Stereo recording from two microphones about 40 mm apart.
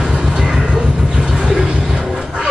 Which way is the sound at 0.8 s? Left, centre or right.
Centre.